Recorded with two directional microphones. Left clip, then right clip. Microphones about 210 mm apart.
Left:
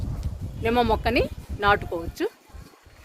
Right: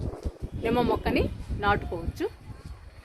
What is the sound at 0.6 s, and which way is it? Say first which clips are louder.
Speech: left 4 dB; 50° left (ahead or behind).